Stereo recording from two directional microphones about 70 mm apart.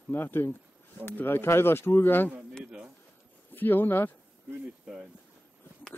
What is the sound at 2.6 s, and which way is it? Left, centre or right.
Pigeon, centre.